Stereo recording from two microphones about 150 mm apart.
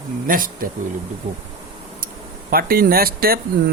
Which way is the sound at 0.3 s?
70° right (ahead or behind).